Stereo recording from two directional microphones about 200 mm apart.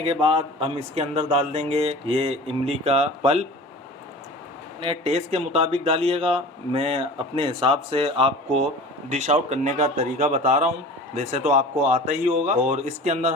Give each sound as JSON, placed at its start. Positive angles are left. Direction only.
{"t": 0.0, "sound": "music", "side_deg": -30}
{"t": 4.8, "sound": "speech", "side_deg": -30}